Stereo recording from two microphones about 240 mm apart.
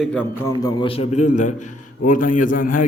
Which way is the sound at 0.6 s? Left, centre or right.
Left.